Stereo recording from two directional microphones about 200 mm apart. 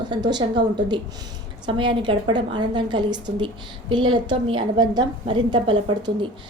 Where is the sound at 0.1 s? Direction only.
20° right (ahead or behind).